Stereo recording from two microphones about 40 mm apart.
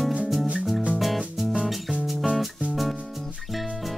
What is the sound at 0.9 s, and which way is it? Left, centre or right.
Music, centre.